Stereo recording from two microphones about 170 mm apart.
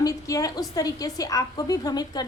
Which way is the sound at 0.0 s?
20° left (ahead or behind).